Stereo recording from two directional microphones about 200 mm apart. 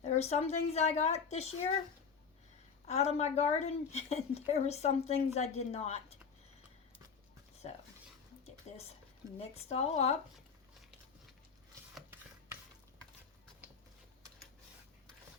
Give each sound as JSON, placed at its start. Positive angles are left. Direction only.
{"t": 0.0, "sound": "a woman's voice", "side_deg": 35}
{"t": 2.8, "sound": "a woman's voice", "side_deg": 35}
{"t": 8.7, "sound": "a woman's voice", "side_deg": 35}